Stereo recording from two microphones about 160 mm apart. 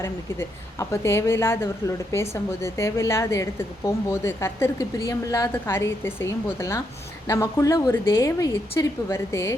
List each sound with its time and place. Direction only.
0.0 s a woman's voice: 15° left (ahead or behind)